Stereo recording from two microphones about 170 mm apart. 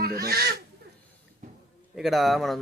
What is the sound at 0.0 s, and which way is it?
Speech, 65° right (ahead or behind).